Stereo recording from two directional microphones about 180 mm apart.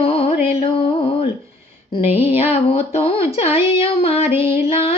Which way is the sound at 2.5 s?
35° left (ahead or behind).